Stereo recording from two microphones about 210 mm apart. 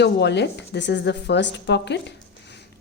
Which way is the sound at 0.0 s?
55° left (ahead or behind).